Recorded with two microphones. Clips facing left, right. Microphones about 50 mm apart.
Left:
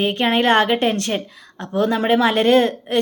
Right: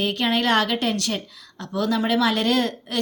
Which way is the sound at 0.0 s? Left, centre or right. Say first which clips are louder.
Left 4 dB; left.